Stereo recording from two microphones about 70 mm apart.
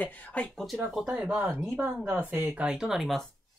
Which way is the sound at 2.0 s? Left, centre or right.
Right.